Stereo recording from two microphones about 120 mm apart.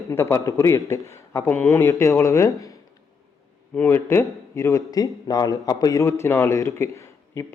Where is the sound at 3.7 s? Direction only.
15° left (ahead or behind).